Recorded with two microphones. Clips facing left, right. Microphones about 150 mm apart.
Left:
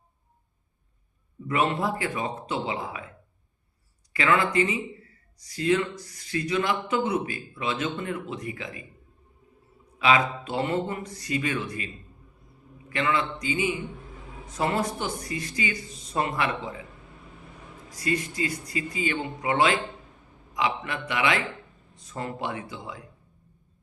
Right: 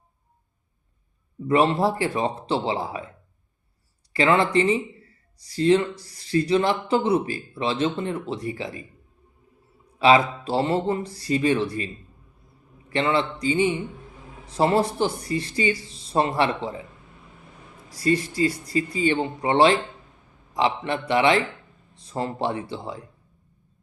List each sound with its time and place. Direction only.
1.5 s speech: 30° right (ahead or behind)
4.1 s speech: 30° right (ahead or behind)
10.0 s speech: 30° right (ahead or behind)
12.9 s speech: 30° right (ahead or behind)
17.9 s speech: 35° right (ahead or behind)